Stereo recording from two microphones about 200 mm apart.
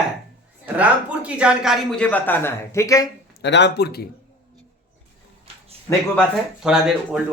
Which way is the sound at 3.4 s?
60° left (ahead or behind).